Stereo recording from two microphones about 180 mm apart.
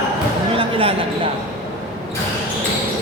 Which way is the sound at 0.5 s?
30° right (ahead or behind).